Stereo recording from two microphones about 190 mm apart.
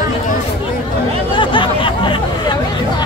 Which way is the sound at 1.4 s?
25° left (ahead or behind).